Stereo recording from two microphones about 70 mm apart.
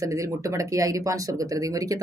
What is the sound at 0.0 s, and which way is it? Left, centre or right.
Speech, right.